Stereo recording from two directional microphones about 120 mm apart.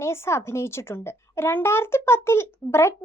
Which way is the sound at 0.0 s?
25° left (ahead or behind).